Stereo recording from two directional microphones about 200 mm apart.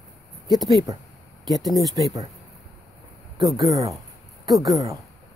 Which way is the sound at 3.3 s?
20° right (ahead or behind).